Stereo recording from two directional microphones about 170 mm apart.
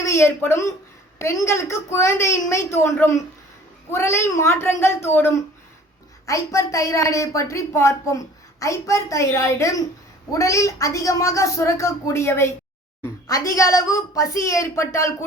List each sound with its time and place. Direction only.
0.0 s a woman's voice: 15° left (ahead or behind)